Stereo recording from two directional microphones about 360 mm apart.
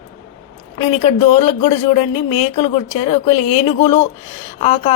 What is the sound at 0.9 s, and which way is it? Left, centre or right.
Speech, centre.